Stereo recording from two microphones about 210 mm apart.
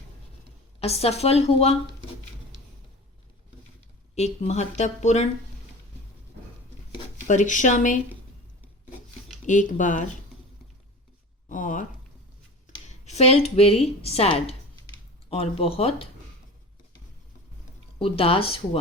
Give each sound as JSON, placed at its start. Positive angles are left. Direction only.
{"t": 0.8, "sound": "a woman's voice", "side_deg": 30}
{"t": 4.1, "sound": "speech", "side_deg": 30}
{"t": 7.3, "sound": "speech", "side_deg": 35}
{"t": 9.5, "sound": "speech", "side_deg": 35}
{"t": 11.4, "sound": "a sound", "side_deg": 40}
{"t": 12.7, "sound": "a woman's voice", "side_deg": 30}
{"t": 18.0, "sound": "a woman's voice", "side_deg": 25}